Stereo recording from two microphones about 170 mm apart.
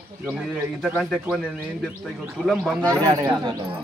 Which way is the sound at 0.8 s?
Centre (ahead or behind).